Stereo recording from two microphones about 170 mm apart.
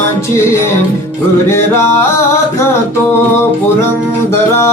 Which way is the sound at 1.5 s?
15° left (ahead or behind).